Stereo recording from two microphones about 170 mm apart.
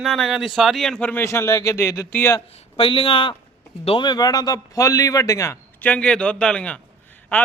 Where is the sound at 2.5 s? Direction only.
30° left (ahead or behind).